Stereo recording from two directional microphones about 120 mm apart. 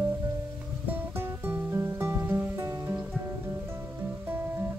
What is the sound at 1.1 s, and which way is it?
Music, 20° right (ahead or behind).